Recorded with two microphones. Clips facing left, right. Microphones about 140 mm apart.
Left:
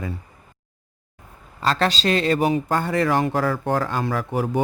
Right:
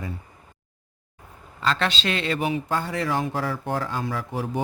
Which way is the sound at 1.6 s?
40° left (ahead or behind).